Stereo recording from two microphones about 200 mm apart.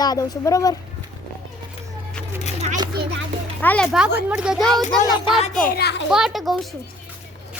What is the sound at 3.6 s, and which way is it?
A woman's voice, 5° left (ahead or behind).